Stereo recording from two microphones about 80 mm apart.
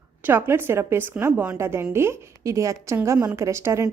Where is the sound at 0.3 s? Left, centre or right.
Right.